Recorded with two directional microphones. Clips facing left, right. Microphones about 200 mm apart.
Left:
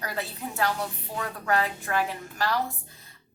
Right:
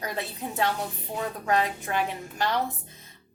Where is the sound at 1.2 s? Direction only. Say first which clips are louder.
Right 1 dB; 20° right (ahead or behind).